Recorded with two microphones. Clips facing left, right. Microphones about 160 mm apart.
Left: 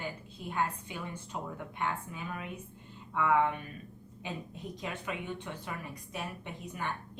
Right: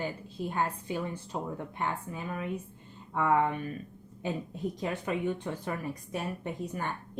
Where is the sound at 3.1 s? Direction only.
35° right (ahead or behind).